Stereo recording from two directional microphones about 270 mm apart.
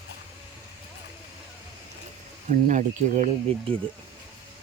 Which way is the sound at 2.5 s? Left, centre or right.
Right.